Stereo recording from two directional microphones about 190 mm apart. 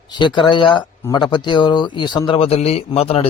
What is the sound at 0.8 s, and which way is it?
Speech, 15° left (ahead or behind).